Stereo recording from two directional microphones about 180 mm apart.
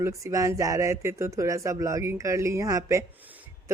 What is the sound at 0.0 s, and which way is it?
Speech, 15° right (ahead or behind).